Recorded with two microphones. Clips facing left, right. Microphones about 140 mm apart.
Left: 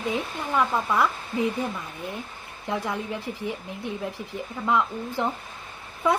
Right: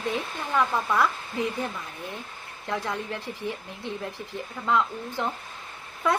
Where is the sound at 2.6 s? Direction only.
15° left (ahead or behind).